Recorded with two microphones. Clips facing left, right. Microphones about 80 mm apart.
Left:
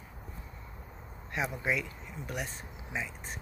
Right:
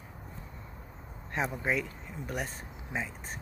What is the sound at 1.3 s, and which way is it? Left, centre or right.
Speech, right.